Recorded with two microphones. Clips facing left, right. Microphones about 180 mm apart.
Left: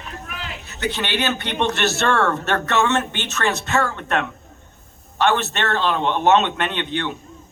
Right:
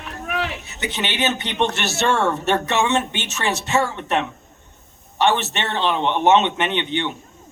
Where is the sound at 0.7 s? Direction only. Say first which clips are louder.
Left 2 dB; 20° right (ahead or behind).